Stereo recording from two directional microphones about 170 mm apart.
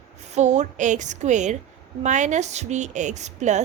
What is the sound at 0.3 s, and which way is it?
A woman's voice, 45° right (ahead or behind).